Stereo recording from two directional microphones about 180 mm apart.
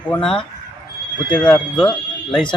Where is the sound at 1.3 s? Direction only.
5° left (ahead or behind).